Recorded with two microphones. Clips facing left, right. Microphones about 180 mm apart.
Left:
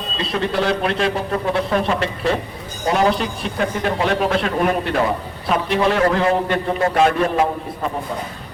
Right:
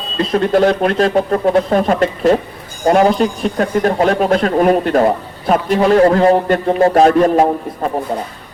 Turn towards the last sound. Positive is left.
turn(degrees=-40)  # may be behind; listen again after turning